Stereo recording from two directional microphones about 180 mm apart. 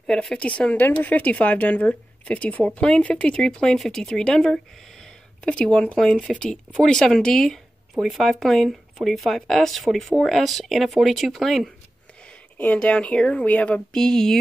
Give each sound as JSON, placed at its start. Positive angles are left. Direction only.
{"t": 0.0, "sound": "speech", "side_deg": 5}